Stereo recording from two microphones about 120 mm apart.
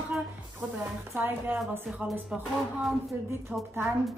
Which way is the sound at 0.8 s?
15° right (ahead or behind).